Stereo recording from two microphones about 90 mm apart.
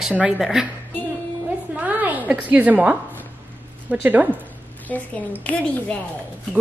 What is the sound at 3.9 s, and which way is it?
Speech, 20° right (ahead or behind).